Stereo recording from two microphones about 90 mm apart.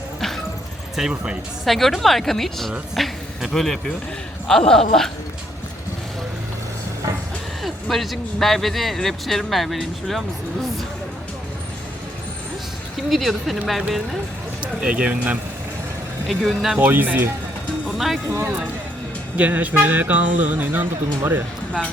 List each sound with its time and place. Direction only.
1.1 s speech: 10° right (ahead or behind)
1.6 s speech: centre (ahead or behind)
7.6 s speech: centre (ahead or behind)
13.1 s speech: centre (ahead or behind)
14.6 s speech: 10° right (ahead or behind)
16.3 s speech: centre (ahead or behind)
16.7 s speech: 20° right (ahead or behind)
17.8 s speech: centre (ahead or behind)
18.3 s speech: 25° right (ahead or behind)